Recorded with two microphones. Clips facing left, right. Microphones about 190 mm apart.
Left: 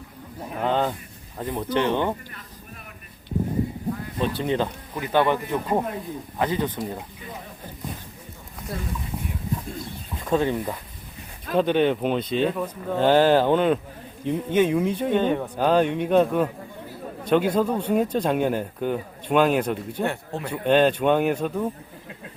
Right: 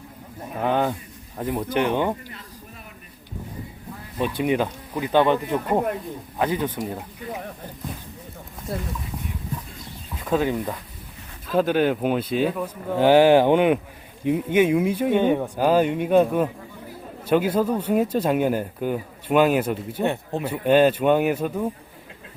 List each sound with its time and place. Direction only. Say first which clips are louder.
0.6 s speech: right 1 dB; 10° right (ahead or behind)
4.2 s speech: right 3 dB; 10° right (ahead or behind)
9.1 s a sound: left 1 dB; 5° left (ahead or behind)
10.2 s speech: even; 5° right (ahead or behind)
20.1 s speech: right 4 dB; 20° right (ahead or behind)
20.5 s speech: right 2 dB; 5° right (ahead or behind)